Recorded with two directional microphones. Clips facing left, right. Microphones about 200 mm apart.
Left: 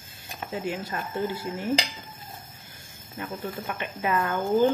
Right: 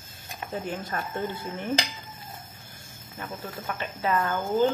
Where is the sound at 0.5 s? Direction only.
10° left (ahead or behind).